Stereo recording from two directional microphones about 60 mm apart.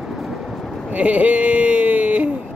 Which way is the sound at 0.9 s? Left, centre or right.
Right.